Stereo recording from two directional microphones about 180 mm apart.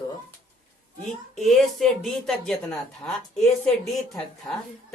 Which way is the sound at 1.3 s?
Centre (ahead or behind).